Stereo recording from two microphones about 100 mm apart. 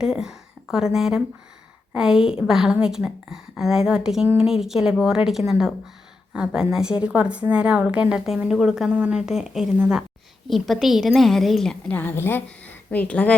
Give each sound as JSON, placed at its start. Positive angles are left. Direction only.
{"t": 0.0, "sound": "a woman's voice", "side_deg": -5}
{"t": 11.9, "sound": "a woman's voice", "side_deg": 20}